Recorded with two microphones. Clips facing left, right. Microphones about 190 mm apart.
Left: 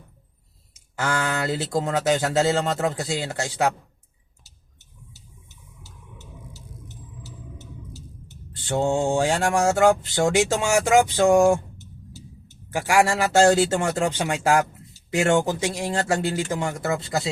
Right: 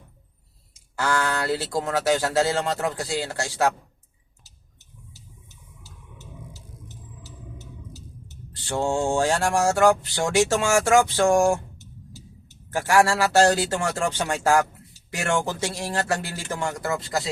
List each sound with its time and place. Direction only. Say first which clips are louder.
0.9 s mantra: right 1 dB; 20° left (ahead or behind)
8.5 s mantra: left 2 dB; 20° left (ahead or behind)
12.7 s mantra: even; 15° left (ahead or behind)